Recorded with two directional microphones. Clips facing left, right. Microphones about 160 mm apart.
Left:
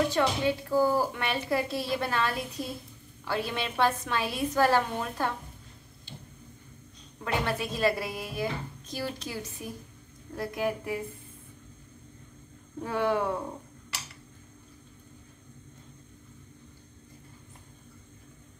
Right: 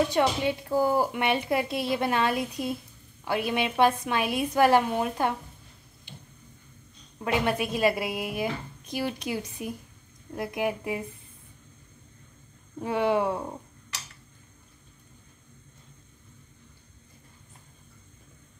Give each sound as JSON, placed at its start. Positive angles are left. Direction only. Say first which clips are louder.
{"t": 0.1, "sound": "a woman's voice", "louder": "right 2 dB", "side_deg": -20}
{"t": 7.2, "sound": "a woman's voice", "louder": "right 4 dB", "side_deg": -15}
{"t": 12.8, "sound": "a woman's voice", "louder": "right 3 dB", "side_deg": -20}